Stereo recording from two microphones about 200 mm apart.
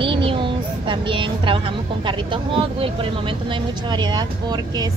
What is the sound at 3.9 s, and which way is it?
Speech, 20° right (ahead or behind).